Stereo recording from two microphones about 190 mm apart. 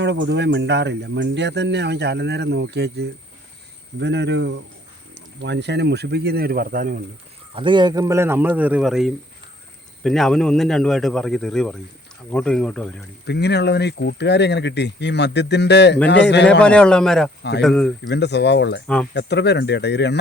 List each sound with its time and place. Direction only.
0.0 s speech: 70° right (ahead or behind); by 7.0 s 45° right (ahead or behind)
7.5 s a man's voice: 25° right (ahead or behind); by 13.0 s 5° left (ahead or behind)
13.2 s speech: 60° left (ahead or behind)
16.5 s speech: 5° left (ahead or behind)
18.1 s speech: 65° left (ahead or behind)